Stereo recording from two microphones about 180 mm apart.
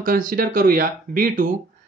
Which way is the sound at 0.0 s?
50° right (ahead or behind).